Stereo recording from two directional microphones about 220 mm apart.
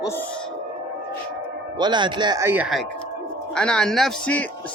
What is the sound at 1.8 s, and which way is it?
A man's voice, 20° right (ahead or behind).